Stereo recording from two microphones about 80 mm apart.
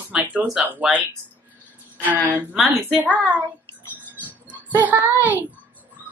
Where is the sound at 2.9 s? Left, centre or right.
Centre.